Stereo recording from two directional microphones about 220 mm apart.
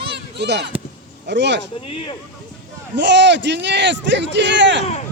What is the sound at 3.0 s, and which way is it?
A man's voice, 55° right (ahead or behind).